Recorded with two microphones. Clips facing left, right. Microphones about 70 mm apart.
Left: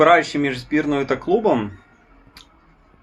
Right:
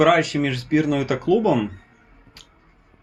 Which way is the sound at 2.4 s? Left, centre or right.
Left.